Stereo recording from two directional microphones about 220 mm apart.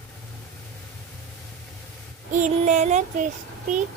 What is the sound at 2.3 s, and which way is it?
Child singing, 35° right (ahead or behind).